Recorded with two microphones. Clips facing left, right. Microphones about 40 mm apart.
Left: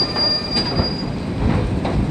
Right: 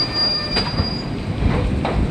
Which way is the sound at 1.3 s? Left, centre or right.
Centre.